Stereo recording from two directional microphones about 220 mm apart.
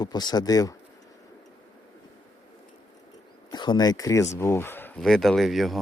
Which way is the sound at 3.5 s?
20° left (ahead or behind).